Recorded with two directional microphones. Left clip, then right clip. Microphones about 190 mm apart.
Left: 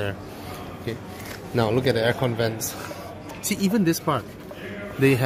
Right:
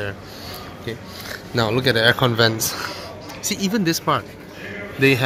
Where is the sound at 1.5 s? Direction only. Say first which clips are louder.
Right 3 dB; 10° right (ahead or behind).